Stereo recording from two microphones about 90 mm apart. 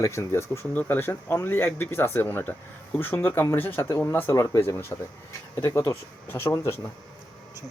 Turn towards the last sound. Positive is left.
turn(degrees=30)  # may be behind; listen again after turning